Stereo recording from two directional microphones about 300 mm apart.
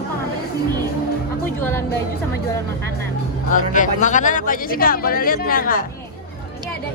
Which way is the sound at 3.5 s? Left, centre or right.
Left.